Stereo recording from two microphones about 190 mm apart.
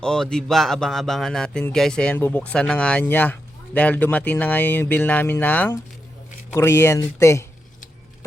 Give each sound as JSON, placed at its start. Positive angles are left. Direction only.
{"t": 0.0, "sound": "speech", "side_deg": 5}